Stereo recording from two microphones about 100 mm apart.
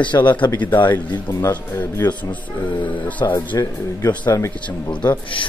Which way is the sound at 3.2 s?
45° left (ahead or behind).